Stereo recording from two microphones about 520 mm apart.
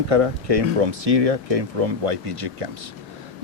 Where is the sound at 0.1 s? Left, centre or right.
Right.